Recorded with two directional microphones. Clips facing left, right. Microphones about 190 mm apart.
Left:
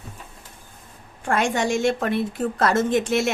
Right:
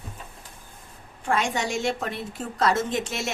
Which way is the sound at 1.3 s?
50° left (ahead or behind).